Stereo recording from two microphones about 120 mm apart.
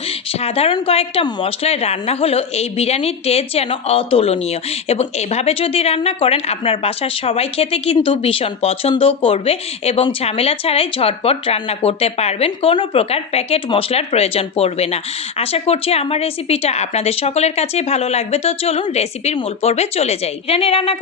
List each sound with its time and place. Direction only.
0.1 s speech: 55° left (ahead or behind)